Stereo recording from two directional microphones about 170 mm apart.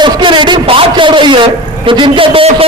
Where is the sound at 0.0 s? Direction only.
30° right (ahead or behind).